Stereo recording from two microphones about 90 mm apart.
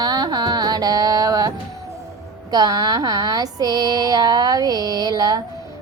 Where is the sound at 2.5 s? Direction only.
45° right (ahead or behind).